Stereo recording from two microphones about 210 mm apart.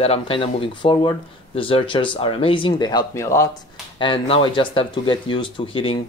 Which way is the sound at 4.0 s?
25° left (ahead or behind).